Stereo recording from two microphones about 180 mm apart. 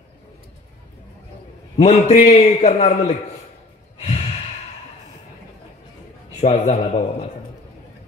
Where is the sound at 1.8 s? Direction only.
35° left (ahead or behind).